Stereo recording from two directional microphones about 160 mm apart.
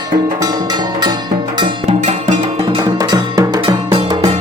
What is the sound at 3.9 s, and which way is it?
Music, 35° right (ahead or behind).